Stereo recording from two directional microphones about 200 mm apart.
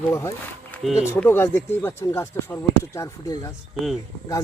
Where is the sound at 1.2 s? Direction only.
10° left (ahead or behind).